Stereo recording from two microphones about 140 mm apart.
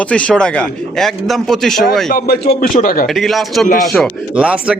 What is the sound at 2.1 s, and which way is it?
Speech, 90° left.